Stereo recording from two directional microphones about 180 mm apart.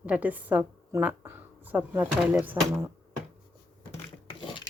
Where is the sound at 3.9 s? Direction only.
30° left (ahead or behind).